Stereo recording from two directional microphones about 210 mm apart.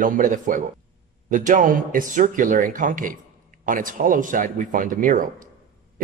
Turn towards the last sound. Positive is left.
turn(degrees=-40)  # may be behind; listen again after turning